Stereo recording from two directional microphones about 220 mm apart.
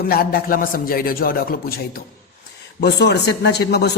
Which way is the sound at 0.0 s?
40° left (ahead or behind).